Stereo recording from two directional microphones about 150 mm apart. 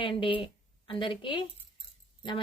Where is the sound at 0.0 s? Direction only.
35° left (ahead or behind).